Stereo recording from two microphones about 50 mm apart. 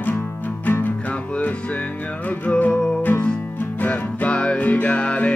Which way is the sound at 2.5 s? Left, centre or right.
Left.